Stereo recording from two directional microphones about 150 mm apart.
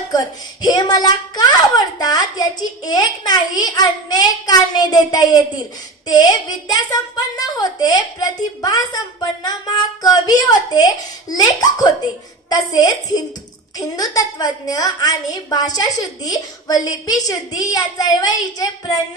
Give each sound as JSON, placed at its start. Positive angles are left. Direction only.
{"t": 0.1, "sound": "speech", "side_deg": 25}